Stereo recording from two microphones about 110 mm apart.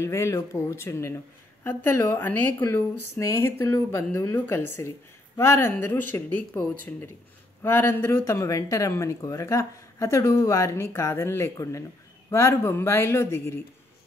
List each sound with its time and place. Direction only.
0.0 s speech: 25° left (ahead or behind)